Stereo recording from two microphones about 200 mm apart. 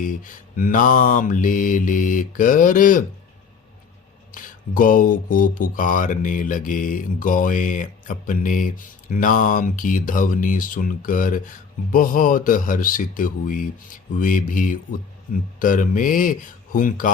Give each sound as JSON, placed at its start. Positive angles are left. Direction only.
{"t": 0.0, "sound": "mantra", "side_deg": 40}
{"t": 4.3, "sound": "mantra", "side_deg": 45}